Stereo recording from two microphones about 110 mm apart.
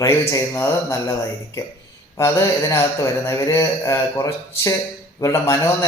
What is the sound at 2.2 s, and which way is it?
A man's voice, 25° left (ahead or behind).